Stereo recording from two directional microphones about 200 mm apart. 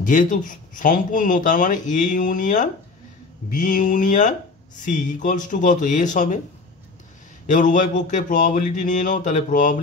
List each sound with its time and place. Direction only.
0.0 s speech: 40° left (ahead or behind)
7.4 s speech: 40° left (ahead or behind)